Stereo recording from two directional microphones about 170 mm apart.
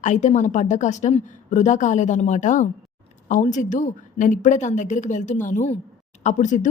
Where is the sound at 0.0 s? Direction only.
45° left (ahead or behind).